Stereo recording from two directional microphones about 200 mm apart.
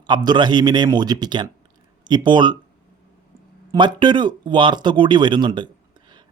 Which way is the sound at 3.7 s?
25° right (ahead or behind).